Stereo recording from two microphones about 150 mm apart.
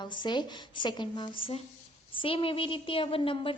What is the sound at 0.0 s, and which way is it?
A woman's voice, 30° left (ahead or behind).